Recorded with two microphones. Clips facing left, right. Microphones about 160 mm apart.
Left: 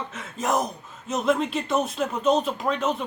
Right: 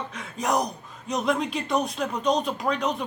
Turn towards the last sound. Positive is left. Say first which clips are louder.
# left 1 dB
turn(degrees=0)  # may be behind; listen again after turning